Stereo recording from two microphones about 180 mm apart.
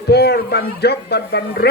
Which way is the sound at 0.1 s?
65° left (ahead or behind).